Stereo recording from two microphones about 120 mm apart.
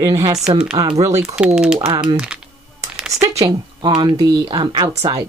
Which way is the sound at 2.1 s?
10° right (ahead or behind).